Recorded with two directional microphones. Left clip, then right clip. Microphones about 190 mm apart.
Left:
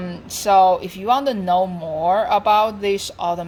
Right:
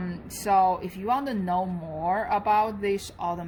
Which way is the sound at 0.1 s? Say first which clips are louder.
Left 8 dB; 25° left (ahead or behind).